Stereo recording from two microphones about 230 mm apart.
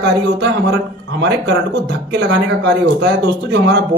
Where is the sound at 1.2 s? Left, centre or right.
Right.